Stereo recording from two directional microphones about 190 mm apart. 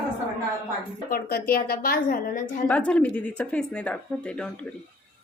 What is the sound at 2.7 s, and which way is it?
Speech, 5° left (ahead or behind).